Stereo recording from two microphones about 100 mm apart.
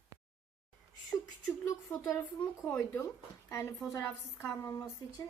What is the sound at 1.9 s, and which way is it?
A woman's voice, 30° left (ahead or behind).